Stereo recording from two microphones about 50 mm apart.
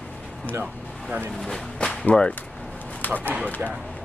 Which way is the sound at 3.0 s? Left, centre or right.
Left.